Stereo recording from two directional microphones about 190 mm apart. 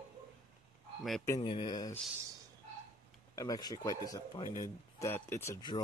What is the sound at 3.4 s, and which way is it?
Speech, 20° left (ahead or behind).